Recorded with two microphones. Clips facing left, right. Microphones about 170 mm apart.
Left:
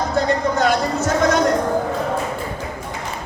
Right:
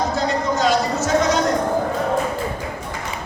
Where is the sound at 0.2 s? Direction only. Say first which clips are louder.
Left 2 dB; 55° left (ahead or behind).